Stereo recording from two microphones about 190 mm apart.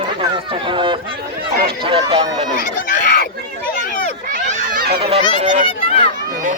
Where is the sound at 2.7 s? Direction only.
55° left (ahead or behind).